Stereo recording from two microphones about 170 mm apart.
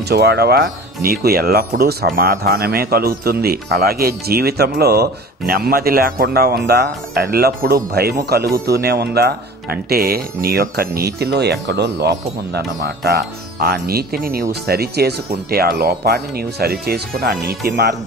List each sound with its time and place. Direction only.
0.1 s speech: 75° right (ahead or behind)
13.7 s speech: 65° right (ahead or behind)